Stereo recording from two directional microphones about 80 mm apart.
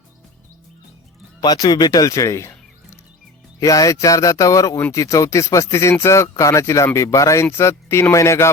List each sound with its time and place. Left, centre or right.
1.4 s speech: left
3.6 s speech: left